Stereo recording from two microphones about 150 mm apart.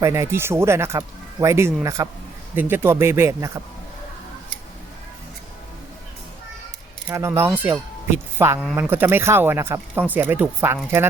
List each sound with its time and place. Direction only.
0.0 s speech: 20° right (ahead or behind)
7.1 s speech: 20° right (ahead or behind)